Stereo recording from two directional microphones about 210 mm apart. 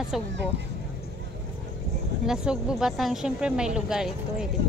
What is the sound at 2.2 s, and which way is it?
Speech, 5° right (ahead or behind).